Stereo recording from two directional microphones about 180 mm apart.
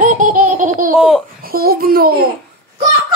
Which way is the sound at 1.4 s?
55° right (ahead or behind).